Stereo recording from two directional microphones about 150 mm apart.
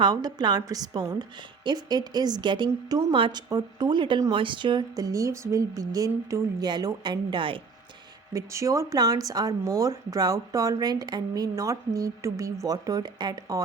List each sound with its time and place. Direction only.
0.0 s speech: 25° right (ahead or behind)
8.3 s speech: 20° right (ahead or behind)